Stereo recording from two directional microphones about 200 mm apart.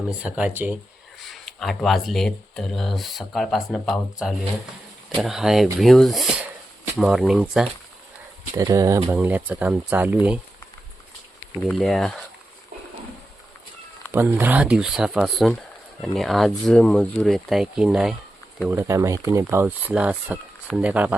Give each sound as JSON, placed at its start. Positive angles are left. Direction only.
{"t": 0.1, "sound": "speech", "side_deg": -5}
{"t": 8.5, "sound": "speech", "side_deg": -15}
{"t": 11.6, "sound": "speech", "side_deg": 0}
{"t": 14.1, "sound": "speech", "side_deg": -10}
{"t": 18.7, "sound": "speech", "side_deg": -15}